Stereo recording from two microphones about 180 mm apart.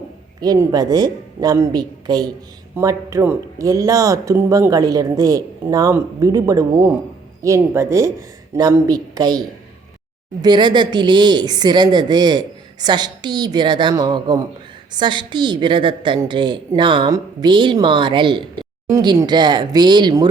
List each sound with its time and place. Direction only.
0.4 s speech: 20° right (ahead or behind)